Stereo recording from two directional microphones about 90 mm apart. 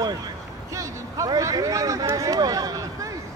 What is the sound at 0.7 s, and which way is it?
Speech, 35° right (ahead or behind).